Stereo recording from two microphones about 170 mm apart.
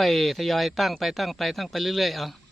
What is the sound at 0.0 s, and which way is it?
Speech, centre (ahead or behind).